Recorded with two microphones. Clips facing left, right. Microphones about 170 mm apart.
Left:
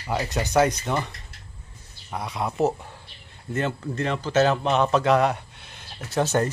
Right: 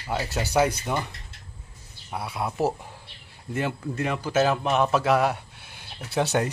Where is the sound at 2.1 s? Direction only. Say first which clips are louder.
Left 1 dB; 5° right (ahead or behind).